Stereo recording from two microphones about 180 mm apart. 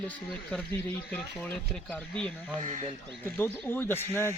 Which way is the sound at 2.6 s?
40° right (ahead or behind).